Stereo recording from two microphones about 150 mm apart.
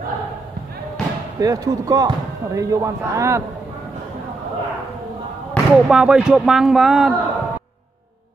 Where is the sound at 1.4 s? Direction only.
25° right (ahead or behind).